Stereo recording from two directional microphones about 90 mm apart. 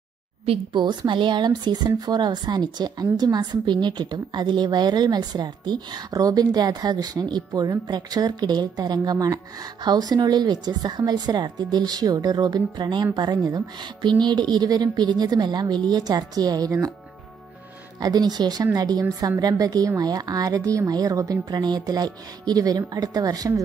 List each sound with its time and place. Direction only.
0.5 s a woman's voice: 60° right (ahead or behind); by 16.9 s 40° right (ahead or behind)
18.0 s a woman's voice: 50° right (ahead or behind)